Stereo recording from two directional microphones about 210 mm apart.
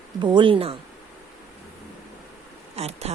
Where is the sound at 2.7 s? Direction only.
30° right (ahead or behind).